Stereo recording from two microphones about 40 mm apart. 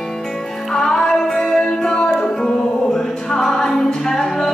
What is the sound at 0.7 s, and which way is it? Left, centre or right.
Music, centre.